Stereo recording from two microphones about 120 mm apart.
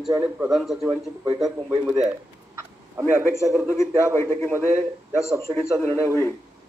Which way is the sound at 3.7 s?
20° left (ahead or behind).